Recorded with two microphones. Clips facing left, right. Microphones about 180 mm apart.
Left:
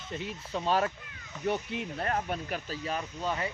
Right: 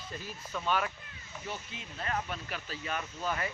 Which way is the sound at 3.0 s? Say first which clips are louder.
Left 2 dB; 20° left (ahead or behind).